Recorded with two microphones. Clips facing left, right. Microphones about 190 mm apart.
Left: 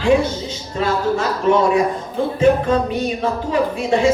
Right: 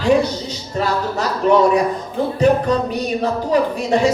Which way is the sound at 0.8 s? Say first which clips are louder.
Left 2 dB; 40° right (ahead or behind).